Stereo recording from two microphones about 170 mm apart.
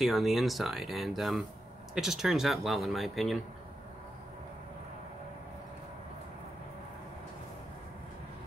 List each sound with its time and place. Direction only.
0.0 s speech: centre (ahead or behind)